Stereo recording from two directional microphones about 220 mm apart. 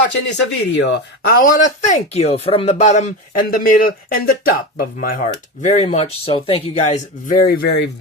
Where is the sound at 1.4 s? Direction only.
35° left (ahead or behind).